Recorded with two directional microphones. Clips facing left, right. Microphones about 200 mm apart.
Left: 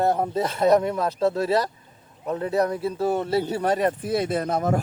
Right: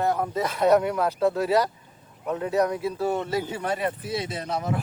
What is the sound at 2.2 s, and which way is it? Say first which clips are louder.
Speech: left 1 dB; 35° left (ahead or behind).